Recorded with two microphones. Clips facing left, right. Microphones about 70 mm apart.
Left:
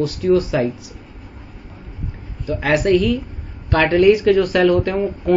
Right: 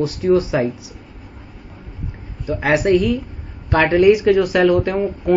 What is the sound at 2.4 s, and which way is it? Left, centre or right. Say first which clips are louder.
Speech: right 1 dB; right.